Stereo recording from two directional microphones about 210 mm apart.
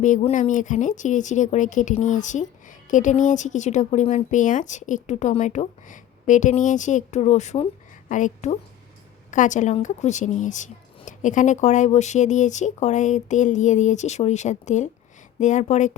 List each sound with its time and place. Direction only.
0.0 s speech: 35° left (ahead or behind)